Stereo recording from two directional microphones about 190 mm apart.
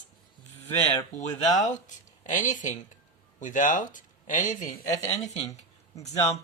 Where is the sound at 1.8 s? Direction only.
40° left (ahead or behind).